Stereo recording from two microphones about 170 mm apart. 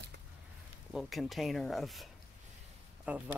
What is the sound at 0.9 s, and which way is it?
Speech, centre (ahead or behind).